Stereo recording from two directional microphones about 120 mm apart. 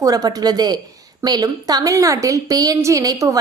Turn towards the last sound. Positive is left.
turn(degrees=-30)  # may be behind; listen again after turning